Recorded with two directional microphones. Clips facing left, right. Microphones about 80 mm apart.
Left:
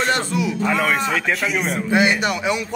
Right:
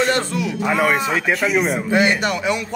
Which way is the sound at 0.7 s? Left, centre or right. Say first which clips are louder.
Right 4 dB; centre.